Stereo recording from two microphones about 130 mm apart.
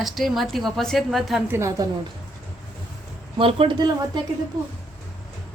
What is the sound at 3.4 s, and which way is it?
Speech, 45° right (ahead or behind).